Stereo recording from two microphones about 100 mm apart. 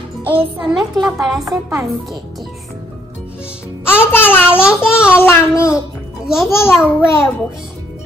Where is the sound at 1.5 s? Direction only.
35° right (ahead or behind).